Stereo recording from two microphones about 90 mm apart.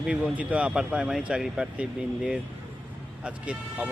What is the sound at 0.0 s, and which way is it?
Speech, 15° right (ahead or behind).